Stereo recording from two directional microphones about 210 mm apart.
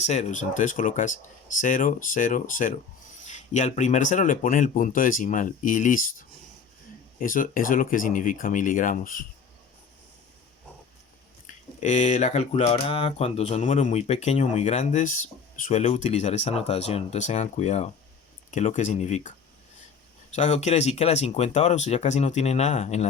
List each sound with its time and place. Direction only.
0.0 s speech: 35° left (ahead or behind)
11.4 s speech: 35° left (ahead or behind)
20.3 s speech: 35° left (ahead or behind)